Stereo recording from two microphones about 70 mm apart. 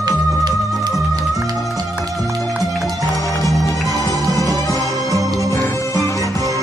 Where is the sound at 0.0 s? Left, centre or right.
Right.